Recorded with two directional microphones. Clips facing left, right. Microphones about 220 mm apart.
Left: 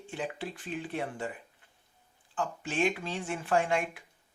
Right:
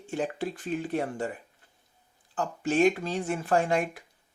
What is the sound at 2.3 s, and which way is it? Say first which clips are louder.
Speech: right 6 dB; 40° right (ahead or behind).